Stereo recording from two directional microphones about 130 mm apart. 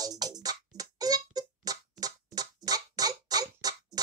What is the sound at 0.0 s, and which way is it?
Music, 30° right (ahead or behind).